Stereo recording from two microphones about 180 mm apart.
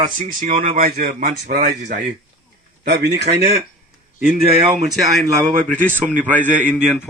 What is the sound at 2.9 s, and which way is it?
Speech, 65° right (ahead or behind).